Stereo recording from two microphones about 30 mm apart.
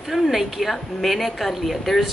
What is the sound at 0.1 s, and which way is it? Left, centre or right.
A woman's voice, centre.